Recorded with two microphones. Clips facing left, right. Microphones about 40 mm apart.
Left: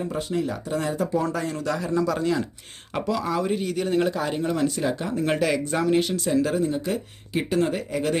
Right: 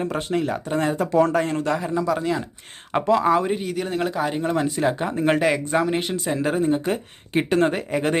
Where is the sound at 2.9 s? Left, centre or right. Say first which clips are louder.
Right 7 dB; right.